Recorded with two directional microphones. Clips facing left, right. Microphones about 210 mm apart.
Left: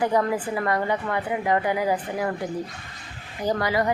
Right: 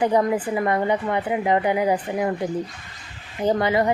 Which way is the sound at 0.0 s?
20° right (ahead or behind).